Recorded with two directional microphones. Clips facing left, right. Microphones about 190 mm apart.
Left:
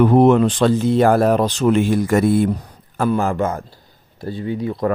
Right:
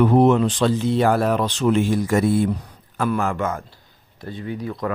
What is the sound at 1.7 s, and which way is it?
Speech, 65° left (ahead or behind).